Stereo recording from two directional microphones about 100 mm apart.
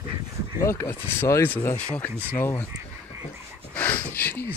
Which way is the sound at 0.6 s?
25° left (ahead or behind).